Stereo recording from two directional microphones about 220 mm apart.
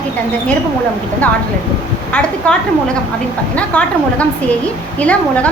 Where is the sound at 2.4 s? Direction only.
5° left (ahead or behind).